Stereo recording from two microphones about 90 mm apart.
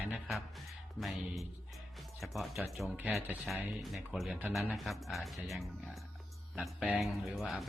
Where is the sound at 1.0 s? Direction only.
Centre (ahead or behind).